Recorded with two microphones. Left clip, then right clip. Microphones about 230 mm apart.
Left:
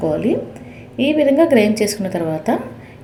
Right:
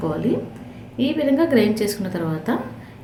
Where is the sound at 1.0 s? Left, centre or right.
Right.